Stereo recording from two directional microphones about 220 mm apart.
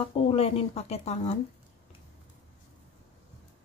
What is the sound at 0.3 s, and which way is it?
Speech, 25° left (ahead or behind).